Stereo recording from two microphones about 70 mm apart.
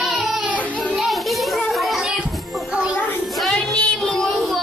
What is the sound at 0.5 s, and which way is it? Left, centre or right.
Music, left.